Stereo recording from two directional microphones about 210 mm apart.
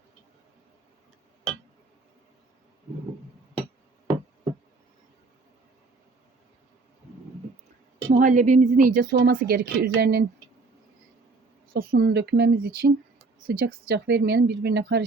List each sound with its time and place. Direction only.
8.1 s a woman's voice: 40° right (ahead or behind)
11.7 s speech: 45° right (ahead or behind)